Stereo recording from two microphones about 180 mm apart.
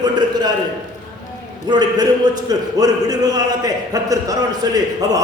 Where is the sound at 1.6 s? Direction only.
25° right (ahead or behind).